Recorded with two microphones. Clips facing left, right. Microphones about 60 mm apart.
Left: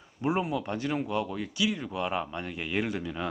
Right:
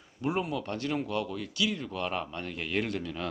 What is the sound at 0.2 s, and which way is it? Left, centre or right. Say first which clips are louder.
Speech: left 2 dB; centre.